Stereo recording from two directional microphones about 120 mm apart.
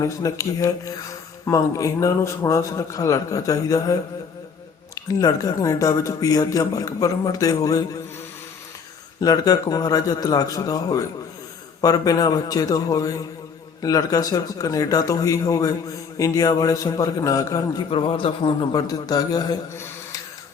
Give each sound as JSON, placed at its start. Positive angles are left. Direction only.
{"t": 0.0, "sound": "speech", "side_deg": 25}
{"t": 4.9, "sound": "speech", "side_deg": 30}
{"t": 9.2, "sound": "a man's voice", "side_deg": 30}
{"t": 17.9, "sound": "a man's voice", "side_deg": 50}
{"t": 18.7, "sound": "a man's voice", "side_deg": 30}
{"t": 19.7, "sound": "a sound", "side_deg": 20}